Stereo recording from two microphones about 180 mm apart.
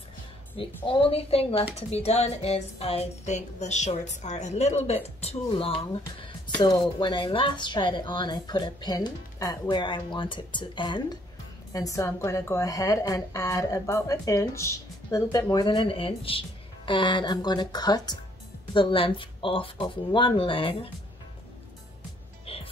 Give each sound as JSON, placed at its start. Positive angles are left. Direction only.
{"t": 0.8, "sound": "speech", "side_deg": 30}
{"t": 22.5, "sound": "music", "side_deg": 30}